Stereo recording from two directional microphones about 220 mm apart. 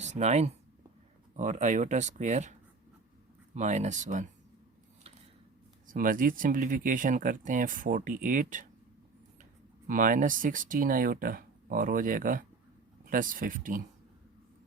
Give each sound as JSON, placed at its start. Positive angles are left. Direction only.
{"t": 0.0, "sound": "speech", "side_deg": -30}
{"t": 5.9, "sound": "speech", "side_deg": -40}